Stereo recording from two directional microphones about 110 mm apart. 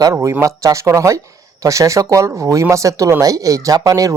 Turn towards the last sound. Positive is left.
turn(degrees=-35)  # may be behind; listen again after turning